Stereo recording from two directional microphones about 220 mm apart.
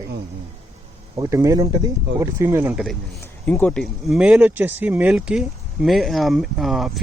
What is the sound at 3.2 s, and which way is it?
Speech, 10° left (ahead or behind).